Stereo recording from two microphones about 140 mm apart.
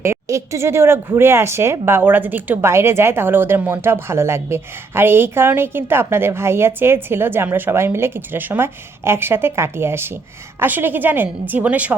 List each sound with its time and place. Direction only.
0.0 s speech: 20° right (ahead or behind)